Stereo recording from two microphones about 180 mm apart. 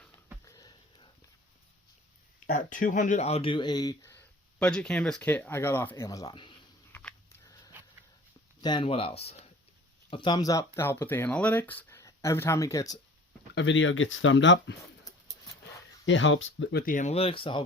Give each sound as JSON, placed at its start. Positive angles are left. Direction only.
{"t": 0.4, "sound": "sniff", "side_deg": 20}
{"t": 2.5, "sound": "speech", "side_deg": 45}
{"t": 6.9, "sound": "a sound", "side_deg": 10}
{"t": 8.6, "sound": "speech", "side_deg": 25}
{"t": 13.5, "sound": "speech", "side_deg": 85}
{"t": 16.0, "sound": "speech", "side_deg": 90}
{"t": 16.9, "sound": "speech", "side_deg": 40}